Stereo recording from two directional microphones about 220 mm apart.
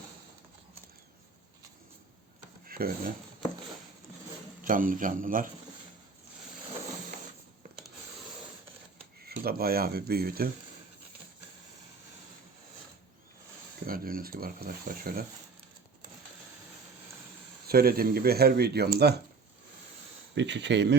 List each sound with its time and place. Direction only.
2.6 s speech: 40° right (ahead or behind)
4.6 s speech: 40° right (ahead or behind)
9.2 s speech: 45° right (ahead or behind)
13.8 s speech: 40° right (ahead or behind)
17.7 s speech: 45° right (ahead or behind)
20.3 s speech: 55° right (ahead or behind)